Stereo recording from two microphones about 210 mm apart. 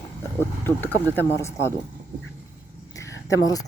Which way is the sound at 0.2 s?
10° left (ahead or behind).